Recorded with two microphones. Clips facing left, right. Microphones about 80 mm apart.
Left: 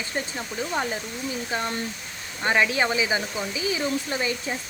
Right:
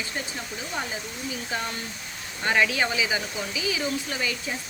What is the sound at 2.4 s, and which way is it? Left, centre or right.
Speech, left.